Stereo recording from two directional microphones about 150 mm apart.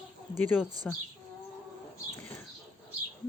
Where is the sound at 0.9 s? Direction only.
5° left (ahead or behind).